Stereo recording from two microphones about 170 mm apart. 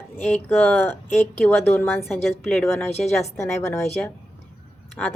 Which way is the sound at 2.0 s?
Centre (ahead or behind).